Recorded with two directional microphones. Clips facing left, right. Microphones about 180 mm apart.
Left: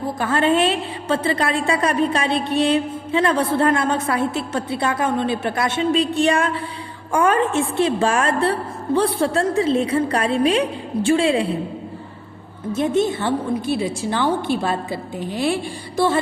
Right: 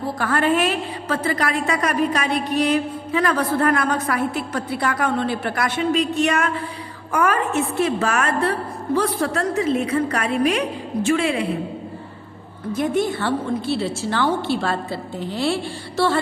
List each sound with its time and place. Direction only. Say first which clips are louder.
0.2 s a woman's voice: left 2 dB; 25° left (ahead or behind)
12.7 s a woman's voice: left 2 dB; 25° left (ahead or behind)